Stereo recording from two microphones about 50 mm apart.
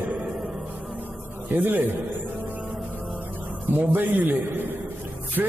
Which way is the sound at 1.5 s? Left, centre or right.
Right.